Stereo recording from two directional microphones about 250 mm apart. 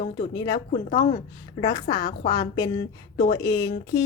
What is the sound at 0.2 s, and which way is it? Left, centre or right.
A woman's voice, centre.